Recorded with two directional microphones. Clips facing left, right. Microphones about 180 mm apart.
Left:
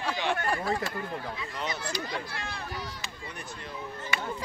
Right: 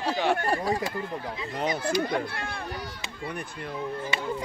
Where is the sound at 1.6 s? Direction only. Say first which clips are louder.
Right 9 dB; 50° right (ahead or behind).